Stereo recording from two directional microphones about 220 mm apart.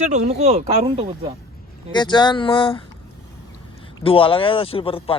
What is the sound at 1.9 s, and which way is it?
Speech, 20° left (ahead or behind).